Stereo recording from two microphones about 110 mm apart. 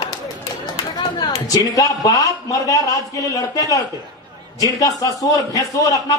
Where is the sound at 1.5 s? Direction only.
35° left (ahead or behind).